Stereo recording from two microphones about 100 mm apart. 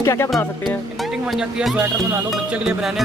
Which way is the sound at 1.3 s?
5° right (ahead or behind).